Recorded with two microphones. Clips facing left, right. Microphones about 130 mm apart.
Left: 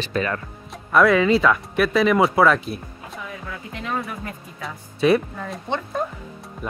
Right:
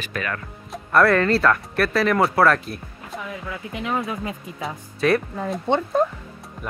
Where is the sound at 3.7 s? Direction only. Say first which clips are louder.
Right 3 dB; 15° right (ahead or behind).